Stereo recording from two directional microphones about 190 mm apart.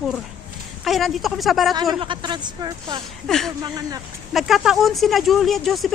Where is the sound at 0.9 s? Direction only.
Centre (ahead or behind).